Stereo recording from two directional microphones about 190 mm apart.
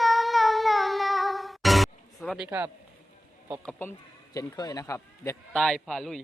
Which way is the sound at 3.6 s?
10° left (ahead or behind).